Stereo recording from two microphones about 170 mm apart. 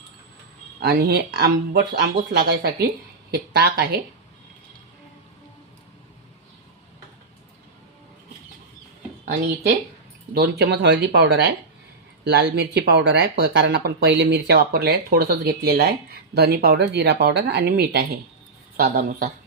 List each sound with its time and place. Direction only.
0.8 s speech: 70° right (ahead or behind)
10.3 s speech: 70° right (ahead or behind)